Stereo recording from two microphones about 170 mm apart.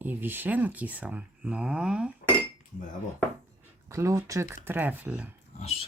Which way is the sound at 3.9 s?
20° right (ahead or behind).